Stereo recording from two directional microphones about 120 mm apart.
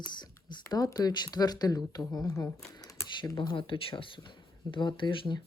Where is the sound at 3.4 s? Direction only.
45° left (ahead or behind).